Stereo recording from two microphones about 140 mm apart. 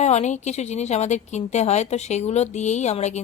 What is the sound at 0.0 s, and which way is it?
Speech, 55° left (ahead or behind).